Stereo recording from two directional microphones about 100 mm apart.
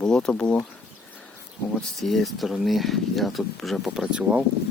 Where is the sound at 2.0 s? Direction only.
Centre (ahead or behind).